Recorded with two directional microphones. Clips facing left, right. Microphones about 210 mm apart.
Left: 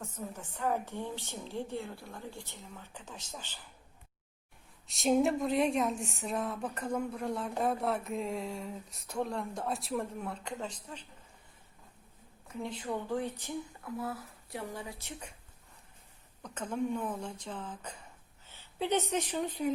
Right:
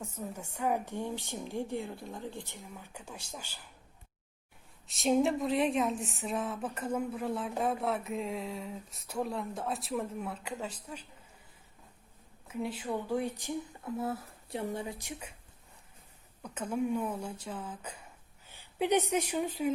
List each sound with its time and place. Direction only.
0.0 s a woman's voice: 10° right (ahead or behind)
4.9 s speech: centre (ahead or behind)
12.5 s a woman's voice: 5° right (ahead or behind)
13.9 s speech: 25° right (ahead or behind)
16.4 s a woman's voice: 10° right (ahead or behind)